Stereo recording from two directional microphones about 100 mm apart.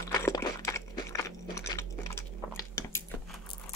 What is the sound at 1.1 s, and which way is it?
Chewing, 30° left (ahead or behind).